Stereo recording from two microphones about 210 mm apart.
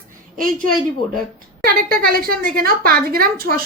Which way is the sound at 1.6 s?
45° right (ahead or behind).